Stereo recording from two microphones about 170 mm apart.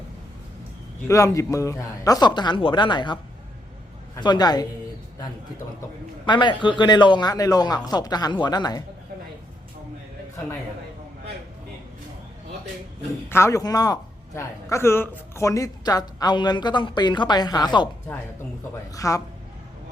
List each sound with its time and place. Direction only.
1.0 s a man's voice: 20° left (ahead or behind)
6.2 s a man's voice: 25° left (ahead or behind)
13.3 s a man's voice: 15° left (ahead or behind)
18.9 s a man's voice: 20° left (ahead or behind)